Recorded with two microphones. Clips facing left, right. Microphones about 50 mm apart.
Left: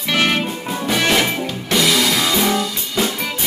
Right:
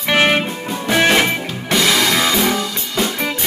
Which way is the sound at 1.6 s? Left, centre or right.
Centre.